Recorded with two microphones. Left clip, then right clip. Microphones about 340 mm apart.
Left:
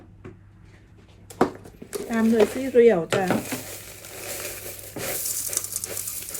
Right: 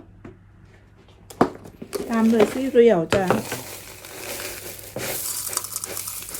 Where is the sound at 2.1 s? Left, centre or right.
Right.